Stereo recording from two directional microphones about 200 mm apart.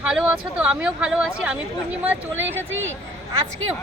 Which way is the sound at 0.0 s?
5° right (ahead or behind).